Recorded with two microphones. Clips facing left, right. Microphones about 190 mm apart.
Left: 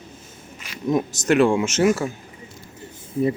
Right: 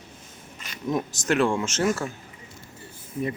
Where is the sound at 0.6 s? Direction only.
10° left (ahead or behind).